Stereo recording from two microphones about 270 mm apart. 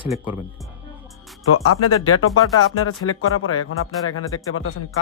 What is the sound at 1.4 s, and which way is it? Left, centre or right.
Speech, left.